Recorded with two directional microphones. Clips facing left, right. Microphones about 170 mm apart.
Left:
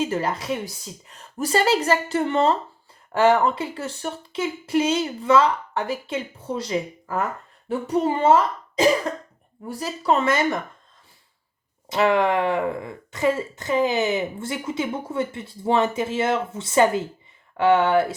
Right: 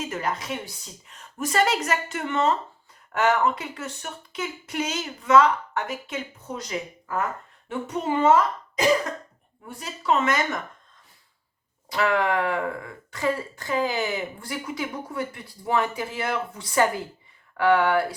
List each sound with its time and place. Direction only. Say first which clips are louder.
0.0 s a woman's voice: left 5 dB; 30° left (ahead or behind)
11.9 s speech: left 4 dB; 20° left (ahead or behind)